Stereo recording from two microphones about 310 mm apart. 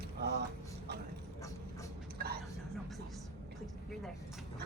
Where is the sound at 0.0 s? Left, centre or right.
Right.